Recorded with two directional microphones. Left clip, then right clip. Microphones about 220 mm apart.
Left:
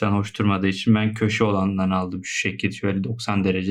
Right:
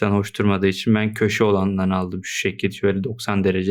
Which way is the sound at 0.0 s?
50° right (ahead or behind).